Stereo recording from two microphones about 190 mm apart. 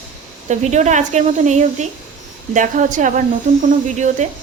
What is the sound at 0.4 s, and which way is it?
Speech, 35° right (ahead or behind).